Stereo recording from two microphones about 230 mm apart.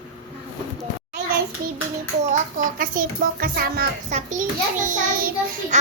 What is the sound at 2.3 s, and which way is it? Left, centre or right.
A child's voice, right.